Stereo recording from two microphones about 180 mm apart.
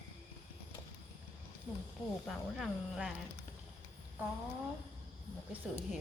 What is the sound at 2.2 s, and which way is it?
Speech, centre (ahead or behind).